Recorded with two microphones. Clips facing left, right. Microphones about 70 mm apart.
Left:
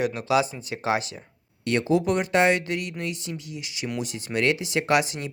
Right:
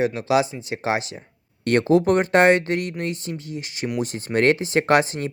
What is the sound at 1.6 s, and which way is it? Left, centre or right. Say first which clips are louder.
Speech: right 5 dB; right.